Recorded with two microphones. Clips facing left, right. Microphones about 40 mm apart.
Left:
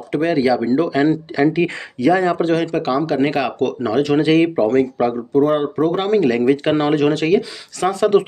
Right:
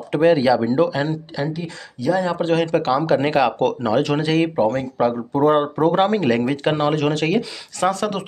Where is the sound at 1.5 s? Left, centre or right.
Left.